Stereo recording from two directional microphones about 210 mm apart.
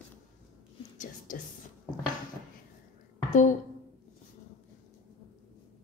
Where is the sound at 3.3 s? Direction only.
35° left (ahead or behind).